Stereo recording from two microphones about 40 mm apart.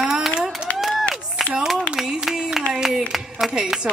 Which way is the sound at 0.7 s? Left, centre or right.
Centre.